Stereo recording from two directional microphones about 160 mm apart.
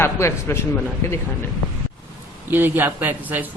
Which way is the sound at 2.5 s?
10° right (ahead or behind).